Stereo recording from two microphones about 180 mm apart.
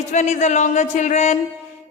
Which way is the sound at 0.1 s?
40° left (ahead or behind).